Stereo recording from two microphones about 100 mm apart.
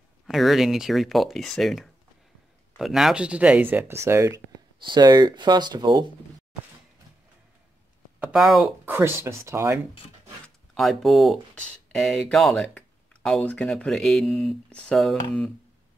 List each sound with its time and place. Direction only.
0.3 s speech: centre (ahead or behind); by 4.4 s 30° right (ahead or behind)
4.8 s speech: 45° right (ahead or behind)
8.3 s speech: 5° right (ahead or behind)
8.8 s speech: 25° right (ahead or behind)
10.8 s speech: centre (ahead or behind)
12.7 s a sound: 10° left (ahead or behind)
13.7 s speech: 5° left (ahead or behind)